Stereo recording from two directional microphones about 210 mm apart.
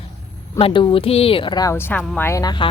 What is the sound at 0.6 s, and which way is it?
Speech, 25° left (ahead or behind).